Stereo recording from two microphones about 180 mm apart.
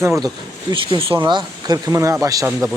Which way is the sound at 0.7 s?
30° right (ahead or behind).